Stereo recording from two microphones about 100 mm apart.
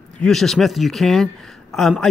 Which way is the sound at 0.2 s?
5° left (ahead or behind).